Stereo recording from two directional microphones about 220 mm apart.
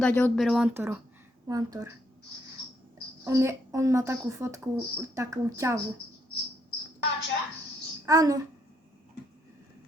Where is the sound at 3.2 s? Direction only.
10° right (ahead or behind).